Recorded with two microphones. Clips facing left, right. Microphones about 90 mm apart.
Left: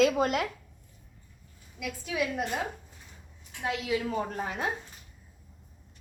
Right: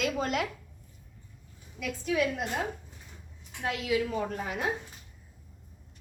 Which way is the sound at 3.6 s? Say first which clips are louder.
Right 1 dB; 25° left (ahead or behind).